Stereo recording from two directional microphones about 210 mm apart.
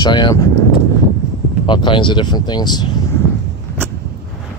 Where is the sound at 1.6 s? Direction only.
20° left (ahead or behind).